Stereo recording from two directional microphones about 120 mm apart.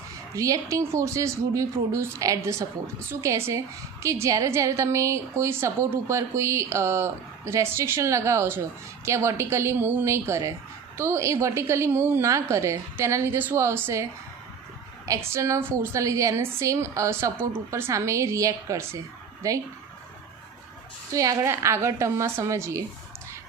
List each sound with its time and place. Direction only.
0.3 s a woman's voice: 25° right (ahead or behind)
15.0 s a woman's voice: 25° right (ahead or behind)
21.2 s a woman's voice: 25° right (ahead or behind)